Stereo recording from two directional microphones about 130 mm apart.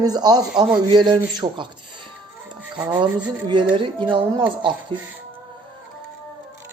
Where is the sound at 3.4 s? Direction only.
35° right (ahead or behind).